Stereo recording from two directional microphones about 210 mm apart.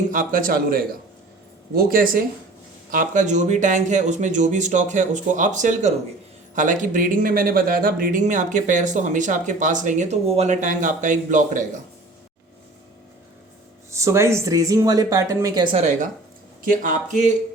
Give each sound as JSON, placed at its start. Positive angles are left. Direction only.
{"t": 0.1, "sound": "speech", "side_deg": -40}
{"t": 13.9, "sound": "speech", "side_deg": -15}
{"t": 15.7, "sound": "speech", "side_deg": -35}